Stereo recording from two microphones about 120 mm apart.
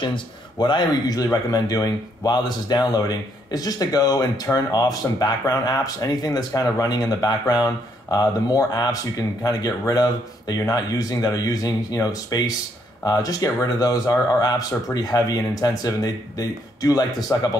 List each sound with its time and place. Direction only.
0.0 s speech: 40° left (ahead or behind)